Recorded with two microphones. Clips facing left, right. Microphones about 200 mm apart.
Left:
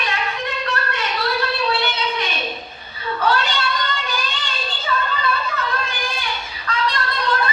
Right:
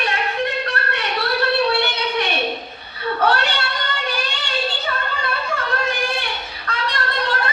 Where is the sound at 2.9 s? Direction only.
65° right (ahead or behind).